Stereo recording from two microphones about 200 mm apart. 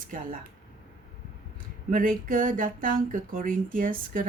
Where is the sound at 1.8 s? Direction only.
40° right (ahead or behind).